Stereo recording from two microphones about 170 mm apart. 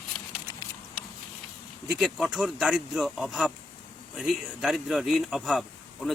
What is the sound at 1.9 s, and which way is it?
A man's voice, 5° right (ahead or behind).